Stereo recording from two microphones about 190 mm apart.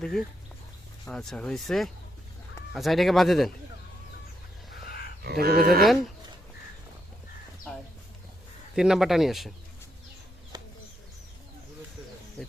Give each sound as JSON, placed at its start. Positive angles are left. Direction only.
{"t": 0.0, "sound": "speech", "side_deg": 0}
{"t": 5.2, "sound": "speech", "side_deg": -55}
{"t": 7.7, "sound": "bird", "side_deg": 5}
{"t": 8.7, "sound": "speech", "side_deg": -5}
{"t": 10.5, "sound": "bird", "side_deg": -20}